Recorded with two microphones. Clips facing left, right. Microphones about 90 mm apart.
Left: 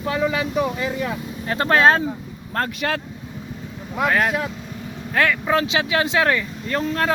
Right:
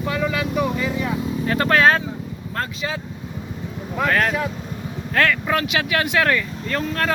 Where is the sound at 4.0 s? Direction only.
15° left (ahead or behind).